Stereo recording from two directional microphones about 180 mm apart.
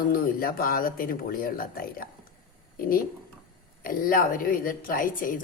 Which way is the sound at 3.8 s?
55° left (ahead or behind).